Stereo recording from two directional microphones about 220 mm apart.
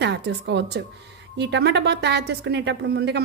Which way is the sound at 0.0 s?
50° right (ahead or behind).